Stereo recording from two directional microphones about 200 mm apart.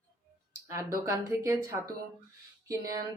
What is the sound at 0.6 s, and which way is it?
Speech, 15° right (ahead or behind).